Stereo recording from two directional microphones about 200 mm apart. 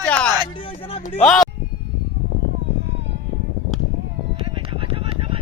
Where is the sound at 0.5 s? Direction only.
25° left (ahead or behind).